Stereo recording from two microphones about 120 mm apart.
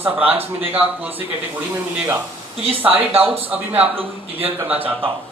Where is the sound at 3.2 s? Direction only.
15° right (ahead or behind).